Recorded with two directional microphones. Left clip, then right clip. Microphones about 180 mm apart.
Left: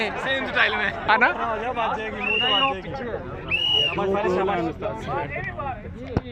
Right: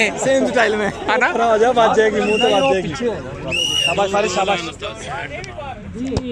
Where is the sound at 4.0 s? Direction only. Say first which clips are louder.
Right 6 dB; 60° right (ahead or behind).